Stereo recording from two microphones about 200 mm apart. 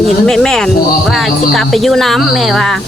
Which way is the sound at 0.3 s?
Centre (ahead or behind).